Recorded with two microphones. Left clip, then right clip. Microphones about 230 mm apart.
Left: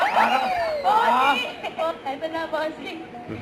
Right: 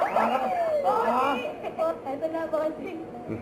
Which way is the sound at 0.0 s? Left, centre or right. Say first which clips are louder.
Left 5 dB; centre.